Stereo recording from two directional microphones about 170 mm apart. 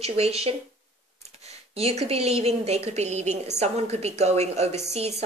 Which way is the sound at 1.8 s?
35° right (ahead or behind).